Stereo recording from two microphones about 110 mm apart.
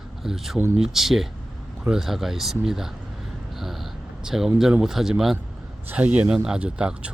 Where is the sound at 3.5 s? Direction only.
Centre (ahead or behind).